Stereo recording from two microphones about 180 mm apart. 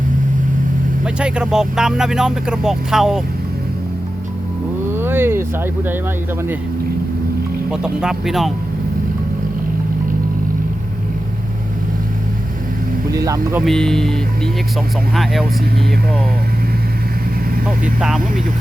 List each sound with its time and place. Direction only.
1.0 s speech: 5° right (ahead or behind)
4.9 s vehicle: 10° right (ahead or behind)
7.7 s speech: 5° right (ahead or behind)
13.1 s speech: 20° right (ahead or behind)
13.6 s speech: centre (ahead or behind)